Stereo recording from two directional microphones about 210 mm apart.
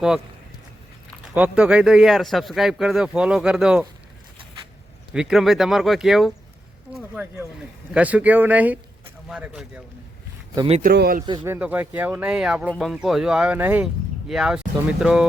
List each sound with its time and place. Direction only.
1.4 s speech: 5° right (ahead or behind)
5.1 s speech: centre (ahead or behind)
10.7 s speech: 30° right (ahead or behind)
10.9 s a man's voice: 50° right (ahead or behind)
11.3 s speech: 10° right (ahead or behind)